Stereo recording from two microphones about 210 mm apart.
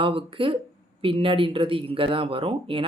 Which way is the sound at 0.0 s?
25° right (ahead or behind).